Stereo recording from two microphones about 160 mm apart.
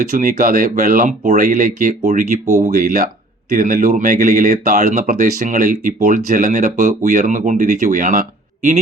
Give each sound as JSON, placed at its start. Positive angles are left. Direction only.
{"t": 0.2, "sound": "speech", "side_deg": -60}